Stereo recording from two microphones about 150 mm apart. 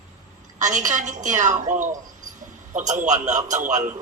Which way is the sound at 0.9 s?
55° right (ahead or behind).